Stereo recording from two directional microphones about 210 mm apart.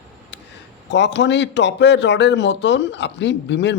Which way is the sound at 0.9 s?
55° left (ahead or behind).